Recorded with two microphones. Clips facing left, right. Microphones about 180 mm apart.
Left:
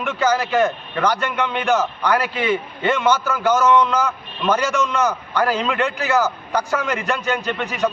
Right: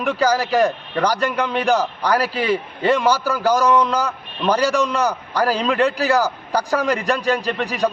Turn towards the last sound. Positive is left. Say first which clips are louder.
# right 1 dB
turn(degrees=-35)  # may be behind; listen again after turning